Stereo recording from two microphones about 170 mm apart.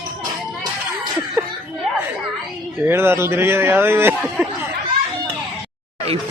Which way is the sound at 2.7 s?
15° right (ahead or behind).